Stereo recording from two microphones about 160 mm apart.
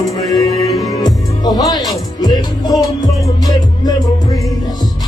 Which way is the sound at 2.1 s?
25° left (ahead or behind).